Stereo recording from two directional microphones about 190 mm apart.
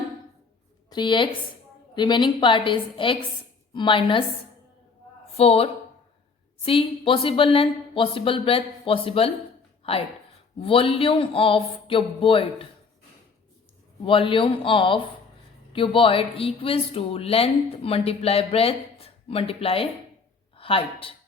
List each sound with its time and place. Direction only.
0.9 s a woman's voice: 25° left (ahead or behind)
5.4 s a woman's voice: 30° left (ahead or behind)
10.6 s a woman's voice: 30° left (ahead or behind)
14.0 s a woman's voice: 25° left (ahead or behind)